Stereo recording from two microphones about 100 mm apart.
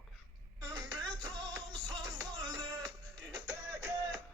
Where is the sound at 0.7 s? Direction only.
45° right (ahead or behind).